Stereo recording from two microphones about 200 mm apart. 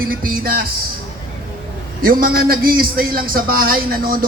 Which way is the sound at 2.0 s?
45° right (ahead or behind).